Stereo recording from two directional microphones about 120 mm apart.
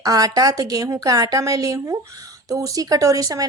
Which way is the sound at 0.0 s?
30° right (ahead or behind).